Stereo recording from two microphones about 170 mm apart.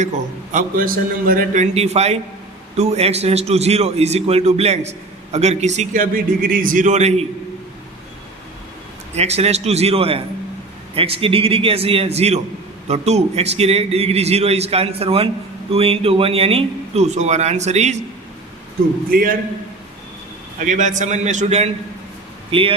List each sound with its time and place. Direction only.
0.5 s a man's voice: 55° right (ahead or behind); by 7.3 s 40° right (ahead or behind)
9.1 s a man's voice: 40° right (ahead or behind)
19.1 s a man's voice: 60° right (ahead or behind)
20.6 s a man's voice: 45° right (ahead or behind)